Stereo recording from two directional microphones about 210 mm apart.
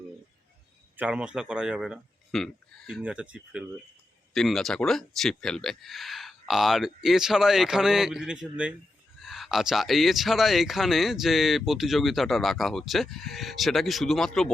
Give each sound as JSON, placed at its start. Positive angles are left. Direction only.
{"t": 0.9, "sound": "speech", "side_deg": -5}